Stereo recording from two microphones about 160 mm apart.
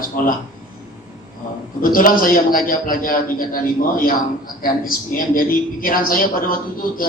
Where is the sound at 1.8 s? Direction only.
60° left (ahead or behind).